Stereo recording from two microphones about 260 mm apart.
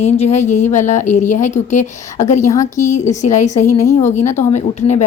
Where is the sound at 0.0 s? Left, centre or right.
Left.